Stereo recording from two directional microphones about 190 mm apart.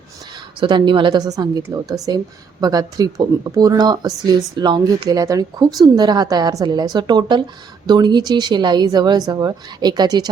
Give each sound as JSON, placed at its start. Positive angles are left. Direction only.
{"t": 0.6, "sound": "a woman's voice", "side_deg": -25}